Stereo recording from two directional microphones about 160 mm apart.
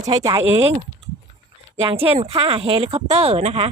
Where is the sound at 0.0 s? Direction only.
25° right (ahead or behind).